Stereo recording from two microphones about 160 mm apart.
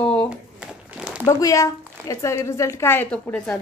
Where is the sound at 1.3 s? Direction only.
20° left (ahead or behind).